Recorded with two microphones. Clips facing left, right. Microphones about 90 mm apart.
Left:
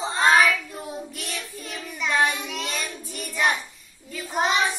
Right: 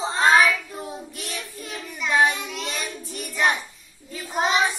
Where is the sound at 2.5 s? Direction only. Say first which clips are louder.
Even; centre (ahead or behind).